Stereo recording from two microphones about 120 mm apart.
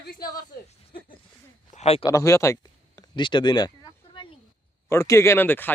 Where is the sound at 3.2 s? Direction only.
40° left (ahead or behind).